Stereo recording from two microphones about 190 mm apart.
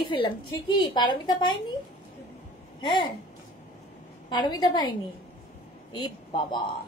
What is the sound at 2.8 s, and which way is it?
Speech, 25° left (ahead or behind).